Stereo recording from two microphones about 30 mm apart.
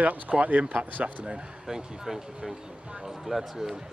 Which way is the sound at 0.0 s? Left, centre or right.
Right.